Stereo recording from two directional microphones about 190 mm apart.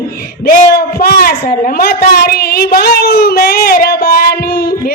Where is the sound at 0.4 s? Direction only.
50° left (ahead or behind).